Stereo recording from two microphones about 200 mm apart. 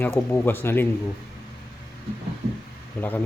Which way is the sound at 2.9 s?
10° left (ahead or behind).